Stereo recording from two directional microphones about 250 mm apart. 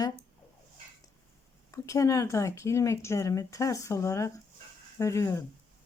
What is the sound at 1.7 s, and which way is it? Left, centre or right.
A woman's voice, centre.